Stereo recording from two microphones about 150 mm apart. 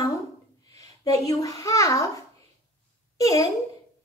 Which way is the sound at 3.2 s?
20° left (ahead or behind).